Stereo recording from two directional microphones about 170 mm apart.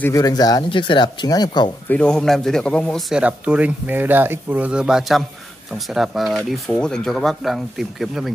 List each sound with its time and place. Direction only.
0.0 s speech: 20° left (ahead or behind)
1.9 s speech: 5° left (ahead or behind)